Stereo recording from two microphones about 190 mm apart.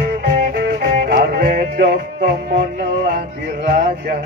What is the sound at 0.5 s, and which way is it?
Music, 55° right (ahead or behind).